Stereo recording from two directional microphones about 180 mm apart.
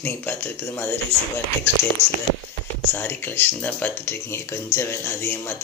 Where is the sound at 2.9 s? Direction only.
10° left (ahead or behind).